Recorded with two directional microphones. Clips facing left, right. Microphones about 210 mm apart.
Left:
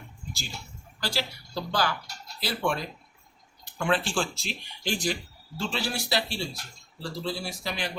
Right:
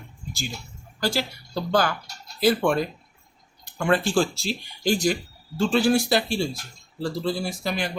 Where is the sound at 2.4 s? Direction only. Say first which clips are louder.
Right 9 dB; 50° right (ahead or behind).